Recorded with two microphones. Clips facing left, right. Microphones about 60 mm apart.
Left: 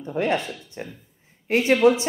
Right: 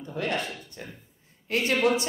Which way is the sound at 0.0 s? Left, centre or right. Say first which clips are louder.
Left 7 dB; left.